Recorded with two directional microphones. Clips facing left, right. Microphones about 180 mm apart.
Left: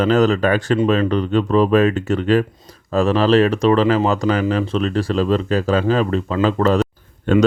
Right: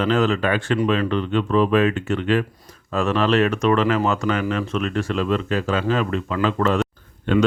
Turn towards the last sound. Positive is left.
turn(degrees=45)  # may be behind; listen again after turning